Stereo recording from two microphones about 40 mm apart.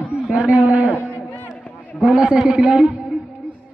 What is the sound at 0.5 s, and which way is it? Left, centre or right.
Speech, right.